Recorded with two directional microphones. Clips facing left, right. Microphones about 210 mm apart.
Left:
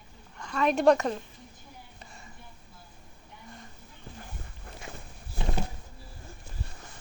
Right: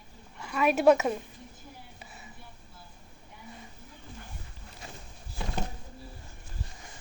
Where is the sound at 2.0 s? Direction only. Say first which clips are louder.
Right 1 dB; 5° right (ahead or behind).